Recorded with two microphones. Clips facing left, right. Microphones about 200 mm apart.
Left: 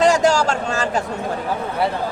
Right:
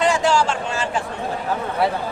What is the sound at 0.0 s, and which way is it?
A man's voice, 40° left (ahead or behind).